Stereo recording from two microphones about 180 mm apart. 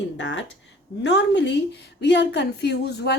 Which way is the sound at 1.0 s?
75° left (ahead or behind).